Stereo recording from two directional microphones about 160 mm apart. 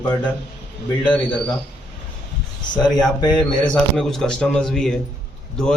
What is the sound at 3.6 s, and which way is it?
A man's voice, 5° left (ahead or behind).